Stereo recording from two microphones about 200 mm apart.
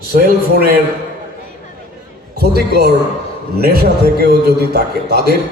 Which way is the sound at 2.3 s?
50° right (ahead or behind).